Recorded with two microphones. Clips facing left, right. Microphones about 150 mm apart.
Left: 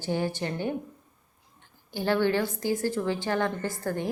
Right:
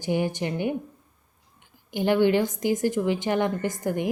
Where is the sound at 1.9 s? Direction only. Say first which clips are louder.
Right 4 dB; 15° right (ahead or behind).